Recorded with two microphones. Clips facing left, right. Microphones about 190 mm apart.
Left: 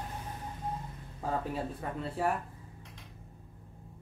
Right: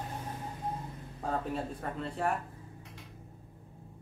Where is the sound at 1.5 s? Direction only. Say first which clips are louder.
Even; 5° left (ahead or behind).